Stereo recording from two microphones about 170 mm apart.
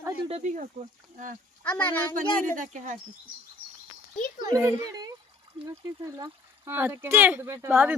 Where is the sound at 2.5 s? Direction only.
50° right (ahead or behind).